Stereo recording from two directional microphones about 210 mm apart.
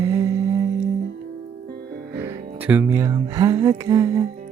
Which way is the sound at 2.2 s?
10° right (ahead or behind).